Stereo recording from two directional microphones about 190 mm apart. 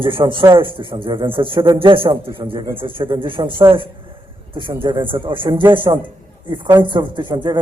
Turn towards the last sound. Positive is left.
turn(degrees=-25)  # may be behind; listen again after turning